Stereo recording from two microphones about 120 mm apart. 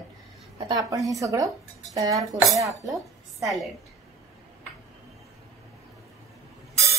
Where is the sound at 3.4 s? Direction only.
Centre (ahead or behind).